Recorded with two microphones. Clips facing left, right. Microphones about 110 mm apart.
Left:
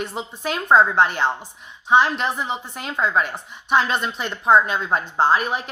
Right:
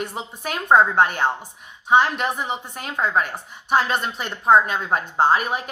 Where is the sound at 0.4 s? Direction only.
50° right (ahead or behind).